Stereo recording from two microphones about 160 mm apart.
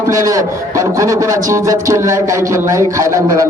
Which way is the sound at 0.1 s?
20° right (ahead or behind).